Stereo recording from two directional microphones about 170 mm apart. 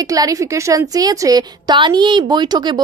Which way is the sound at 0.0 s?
20° right (ahead or behind).